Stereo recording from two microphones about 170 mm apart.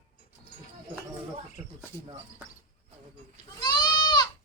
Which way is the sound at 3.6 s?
25° left (ahead or behind).